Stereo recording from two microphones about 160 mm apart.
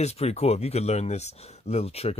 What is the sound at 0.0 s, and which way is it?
Speech, 40° left (ahead or behind).